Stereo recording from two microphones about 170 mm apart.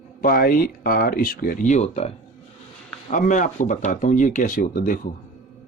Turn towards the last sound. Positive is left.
turn(degrees=50)  # may be behind; listen again after turning